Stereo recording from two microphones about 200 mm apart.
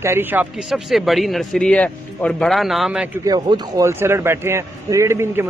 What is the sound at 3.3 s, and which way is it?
A man's voice, 20° right (ahead or behind).